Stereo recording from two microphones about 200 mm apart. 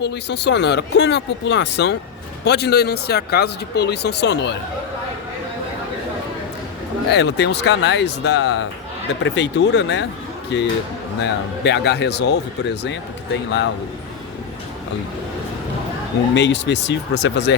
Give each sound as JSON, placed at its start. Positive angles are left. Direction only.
{"t": 0.0, "sound": "speech", "side_deg": 60}
{"t": 7.1, "sound": "speech", "side_deg": 60}
{"t": 16.3, "sound": "speech", "side_deg": 60}